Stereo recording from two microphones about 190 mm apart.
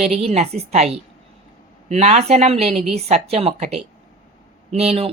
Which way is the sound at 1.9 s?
35° right (ahead or behind).